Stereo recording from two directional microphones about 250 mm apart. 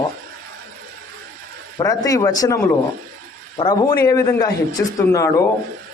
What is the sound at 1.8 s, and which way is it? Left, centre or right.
Speech, centre.